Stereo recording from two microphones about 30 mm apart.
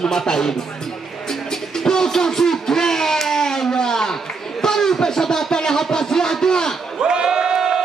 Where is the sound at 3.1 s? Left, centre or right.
Centre.